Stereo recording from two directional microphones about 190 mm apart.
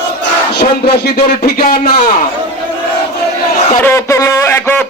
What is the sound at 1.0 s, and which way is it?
Speech, 55° left (ahead or behind).